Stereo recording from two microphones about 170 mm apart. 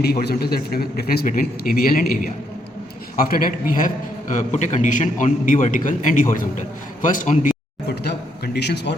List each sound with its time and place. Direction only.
0.0 s a man's voice: 65° left (ahead or behind)
8.5 s a man's voice: 80° left